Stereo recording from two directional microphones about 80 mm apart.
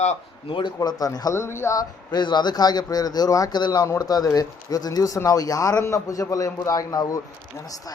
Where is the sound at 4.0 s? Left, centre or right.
Left.